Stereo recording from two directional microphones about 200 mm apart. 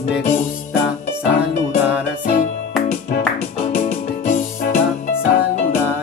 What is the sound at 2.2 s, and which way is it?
Music, 45° left (ahead or behind).